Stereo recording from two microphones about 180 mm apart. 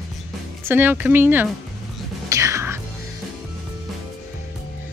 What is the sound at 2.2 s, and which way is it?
Music, 15° right (ahead or behind).